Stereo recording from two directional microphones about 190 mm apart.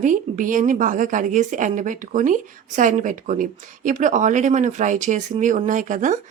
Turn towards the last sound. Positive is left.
turn(degrees=-40)  # may be behind; listen again after turning